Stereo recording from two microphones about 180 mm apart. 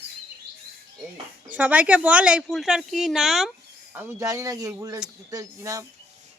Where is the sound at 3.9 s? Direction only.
15° right (ahead or behind).